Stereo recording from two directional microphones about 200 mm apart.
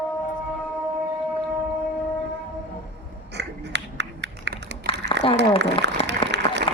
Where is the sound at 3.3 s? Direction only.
60° right (ahead or behind).